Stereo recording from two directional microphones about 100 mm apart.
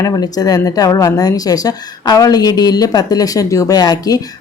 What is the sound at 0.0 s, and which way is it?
A woman's voice, 40° left (ahead or behind).